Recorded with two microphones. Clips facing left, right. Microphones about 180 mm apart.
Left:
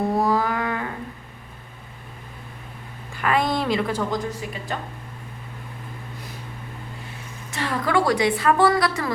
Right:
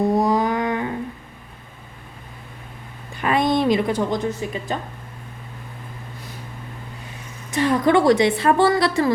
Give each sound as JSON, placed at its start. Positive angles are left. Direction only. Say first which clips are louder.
{"t": 0.2, "sound": "a sound", "louder": "right 3 dB", "side_deg": -20}
{"t": 3.2, "sound": "a woman's voice", "louder": "right 3 dB", "side_deg": -20}
{"t": 7.5, "sound": "a woman's voice", "louder": "right 6 dB", "side_deg": -20}